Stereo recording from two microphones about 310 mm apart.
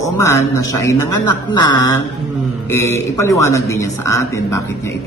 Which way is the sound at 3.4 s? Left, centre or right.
Left.